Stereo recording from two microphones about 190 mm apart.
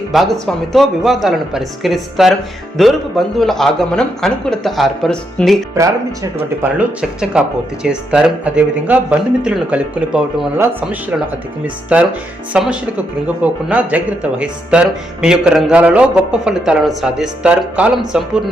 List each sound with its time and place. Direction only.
0.1 s speech: centre (ahead or behind)
5.7 s speech: 15° right (ahead or behind)
6.6 s speech: 5° right (ahead or behind)